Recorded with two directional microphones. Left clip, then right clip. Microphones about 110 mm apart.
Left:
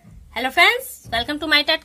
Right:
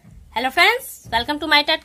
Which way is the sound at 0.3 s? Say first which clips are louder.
Even; 30° right (ahead or behind).